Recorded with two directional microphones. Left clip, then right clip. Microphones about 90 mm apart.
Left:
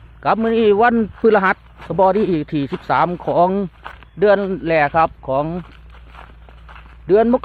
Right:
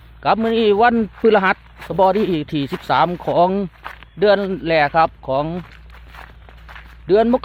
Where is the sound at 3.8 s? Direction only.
35° left (ahead or behind).